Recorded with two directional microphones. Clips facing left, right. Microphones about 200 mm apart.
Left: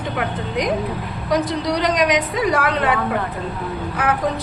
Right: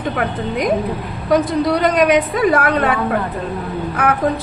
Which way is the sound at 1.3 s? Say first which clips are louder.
Right 5 dB; 55° right (ahead or behind).